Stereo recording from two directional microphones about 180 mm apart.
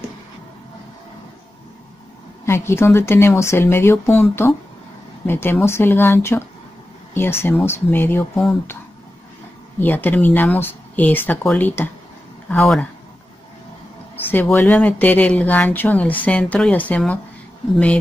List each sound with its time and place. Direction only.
2.4 s speech: 15° left (ahead or behind)
9.8 s speech: 10° left (ahead or behind)
14.3 s speech: 10° left (ahead or behind)